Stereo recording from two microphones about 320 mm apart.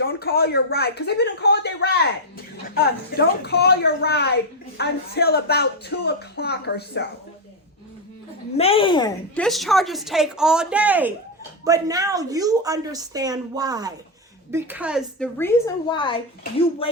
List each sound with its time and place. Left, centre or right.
0.0 s a woman's voice: left
8.5 s a woman's voice: centre